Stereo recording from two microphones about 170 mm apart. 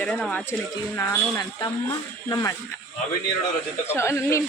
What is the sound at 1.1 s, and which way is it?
Speech, 20° left (ahead or behind).